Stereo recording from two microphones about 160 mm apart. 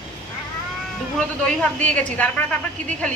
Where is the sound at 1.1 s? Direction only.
10° left (ahead or behind).